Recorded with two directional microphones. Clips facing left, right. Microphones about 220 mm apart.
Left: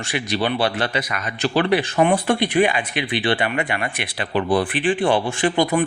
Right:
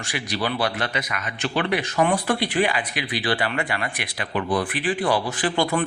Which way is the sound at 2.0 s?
25° left (ahead or behind).